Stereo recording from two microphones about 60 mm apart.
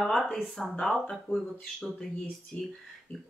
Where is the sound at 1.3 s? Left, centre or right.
Left.